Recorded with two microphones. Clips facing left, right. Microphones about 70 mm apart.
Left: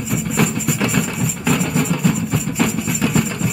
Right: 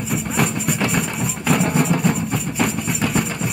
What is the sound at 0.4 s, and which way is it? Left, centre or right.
Music, centre.